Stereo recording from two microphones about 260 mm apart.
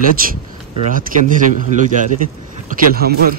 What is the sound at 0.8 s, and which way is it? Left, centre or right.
Speech, right.